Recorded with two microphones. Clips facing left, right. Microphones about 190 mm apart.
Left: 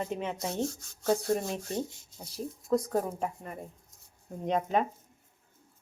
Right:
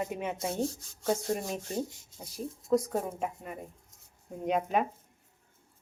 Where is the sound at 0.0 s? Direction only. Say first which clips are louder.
Even; 10° right (ahead or behind).